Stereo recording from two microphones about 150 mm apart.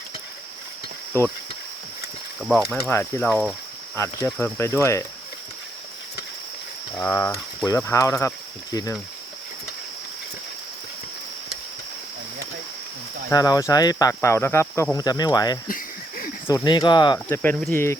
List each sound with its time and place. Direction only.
2.4 s speech: centre (ahead or behind)
2.9 s speech: 10° left (ahead or behind)
3.9 s cricket: 20° left (ahead or behind)
4.4 s speech: 15° left (ahead or behind)
6.9 s speech: 15° left (ahead or behind)
7.8 s cricket: 20° left (ahead or behind)
13.3 s cricket: 25° left (ahead or behind)
15.6 s cricket: 65° left (ahead or behind)
16.6 s cricket: 30° left (ahead or behind)
17.2 s speech: 10° left (ahead or behind)